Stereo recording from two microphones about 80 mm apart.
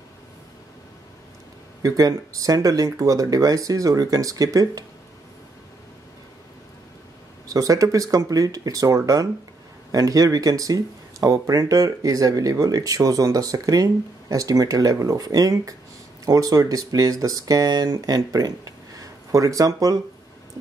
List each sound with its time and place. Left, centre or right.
1.8 s speech: right
7.4 s speech: right